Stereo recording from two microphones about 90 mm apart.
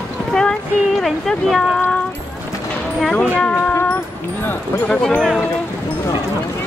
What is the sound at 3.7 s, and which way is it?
Music, 25° left (ahead or behind).